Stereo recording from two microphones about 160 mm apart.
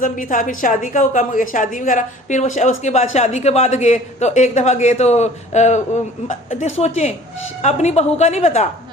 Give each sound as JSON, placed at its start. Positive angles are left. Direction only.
{"t": 0.0, "sound": "a woman's voice", "side_deg": 55}